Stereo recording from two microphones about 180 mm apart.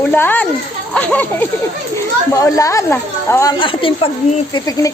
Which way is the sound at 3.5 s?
30° left (ahead or behind).